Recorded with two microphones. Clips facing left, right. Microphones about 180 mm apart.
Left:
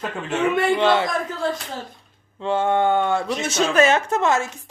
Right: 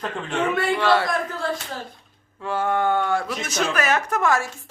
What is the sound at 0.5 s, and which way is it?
Speech, 20° left (ahead or behind).